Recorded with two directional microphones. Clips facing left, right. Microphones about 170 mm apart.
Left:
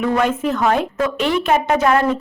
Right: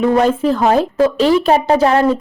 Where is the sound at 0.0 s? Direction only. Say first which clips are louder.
Right 5 dB; 30° right (ahead or behind).